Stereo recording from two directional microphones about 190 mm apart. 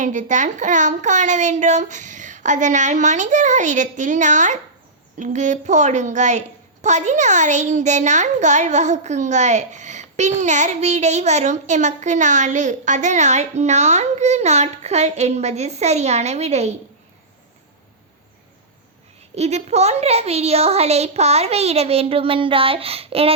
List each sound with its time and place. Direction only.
0.0 s a child's voice: 40° right (ahead or behind)
19.4 s a child's voice: 35° right (ahead or behind)